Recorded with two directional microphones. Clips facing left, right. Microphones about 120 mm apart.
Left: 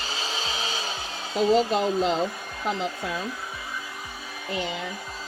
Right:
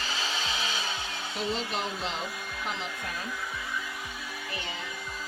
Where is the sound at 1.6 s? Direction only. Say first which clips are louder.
Left 10 dB; 40° left (ahead or behind).